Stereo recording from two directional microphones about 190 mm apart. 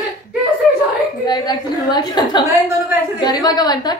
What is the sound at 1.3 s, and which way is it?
A woman's voice, 20° left (ahead or behind).